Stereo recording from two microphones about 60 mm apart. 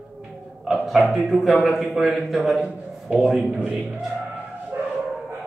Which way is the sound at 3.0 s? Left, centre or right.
Centre.